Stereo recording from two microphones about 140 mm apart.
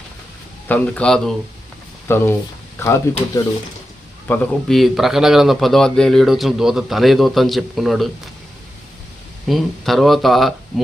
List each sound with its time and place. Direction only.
0.7 s speech: 5° left (ahead or behind)
2.0 s speech: 15° left (ahead or behind)
4.3 s speech: 15° left (ahead or behind)
4.7 s speech: centre (ahead or behind)
9.5 s speech: centre (ahead or behind)